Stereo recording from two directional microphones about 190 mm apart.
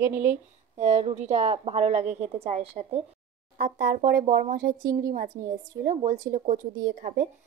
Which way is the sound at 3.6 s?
50° right (ahead or behind).